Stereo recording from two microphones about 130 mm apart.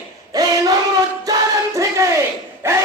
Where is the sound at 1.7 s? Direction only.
25° right (ahead or behind).